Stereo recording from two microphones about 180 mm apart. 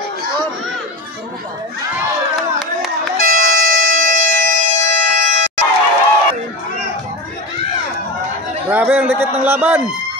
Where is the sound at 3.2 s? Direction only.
50° right (ahead or behind).